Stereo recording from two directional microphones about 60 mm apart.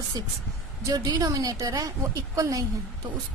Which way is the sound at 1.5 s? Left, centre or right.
Right.